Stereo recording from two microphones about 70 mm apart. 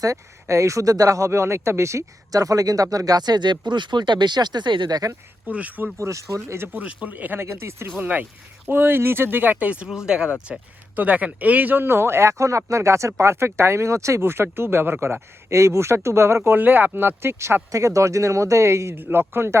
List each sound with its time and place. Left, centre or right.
0.0 s speech: right
5.5 s speech: right
6.0 s speech: right
6.7 s speech: right
7.4 s speech: right
7.9 s speech: right
17.7 s speech: right